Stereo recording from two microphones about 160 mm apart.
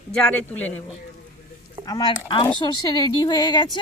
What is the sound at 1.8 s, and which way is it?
Speech, 25° left (ahead or behind).